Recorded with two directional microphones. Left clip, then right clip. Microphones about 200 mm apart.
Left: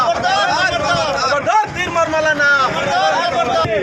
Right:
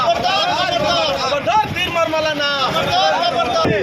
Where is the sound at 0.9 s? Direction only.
5° left (ahead or behind).